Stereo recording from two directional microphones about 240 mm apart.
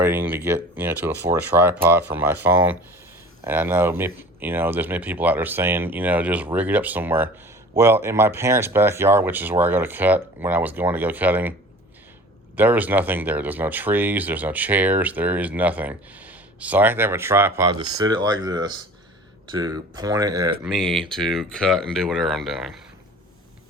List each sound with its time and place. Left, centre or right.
0.0 s speech: centre
12.5 s speech: centre
20.7 s speech: centre